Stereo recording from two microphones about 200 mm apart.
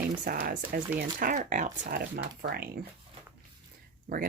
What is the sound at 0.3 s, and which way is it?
Speech, 50° right (ahead or behind).